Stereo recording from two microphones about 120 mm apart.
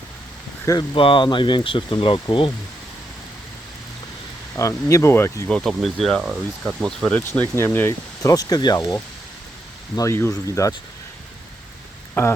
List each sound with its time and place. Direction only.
0.8 s speech: 45° left (ahead or behind)
4.5 s speech: 25° left (ahead or behind)
5.5 s speech: 5° left (ahead or behind)
7.5 s speech: 20° left (ahead or behind)
8.2 s speech: 30° left (ahead or behind)
12.2 s speech: 20° left (ahead or behind)